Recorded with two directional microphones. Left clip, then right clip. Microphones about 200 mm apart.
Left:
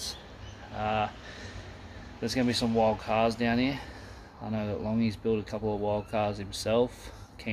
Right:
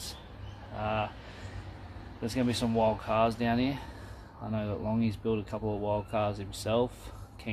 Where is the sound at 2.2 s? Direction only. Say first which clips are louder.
Left 3 dB; 5° left (ahead or behind).